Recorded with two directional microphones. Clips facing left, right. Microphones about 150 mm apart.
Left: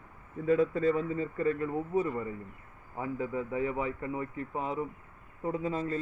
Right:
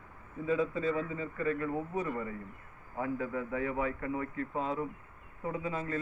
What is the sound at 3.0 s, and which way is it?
A man's voice, 20° left (ahead or behind).